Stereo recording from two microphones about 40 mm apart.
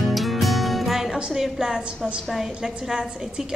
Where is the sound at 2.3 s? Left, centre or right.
Centre.